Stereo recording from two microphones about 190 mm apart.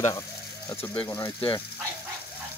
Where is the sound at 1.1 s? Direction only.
25° left (ahead or behind).